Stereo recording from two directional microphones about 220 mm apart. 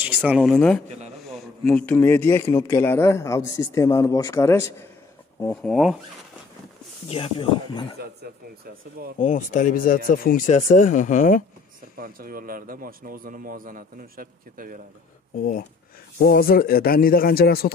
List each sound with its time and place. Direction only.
0.0 s speech: 5° right (ahead or behind)
0.8 s a man's voice: 30° right (ahead or behind)
1.3 s speech: 5° left (ahead or behind)
7.1 s speech: 25° left (ahead or behind)
9.2 s speech: 35° left (ahead or behind)
12.0 s speech: 40° right (ahead or behind)
16.2 s a man's voice: 40° left (ahead or behind)